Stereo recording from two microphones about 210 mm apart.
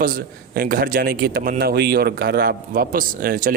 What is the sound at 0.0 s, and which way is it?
A man's voice, 45° right (ahead or behind).